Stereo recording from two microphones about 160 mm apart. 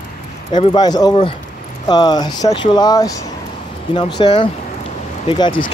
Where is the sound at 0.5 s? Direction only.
25° left (ahead or behind).